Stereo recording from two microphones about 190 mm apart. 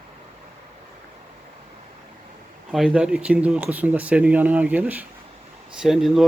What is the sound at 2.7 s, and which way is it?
Speech, 5° right (ahead or behind).